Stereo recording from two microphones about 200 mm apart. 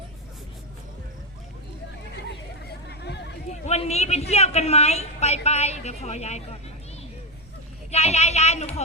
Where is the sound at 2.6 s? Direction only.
55° left (ahead or behind).